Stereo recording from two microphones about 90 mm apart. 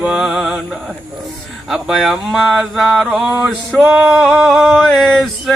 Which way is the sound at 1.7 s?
5° right (ahead or behind).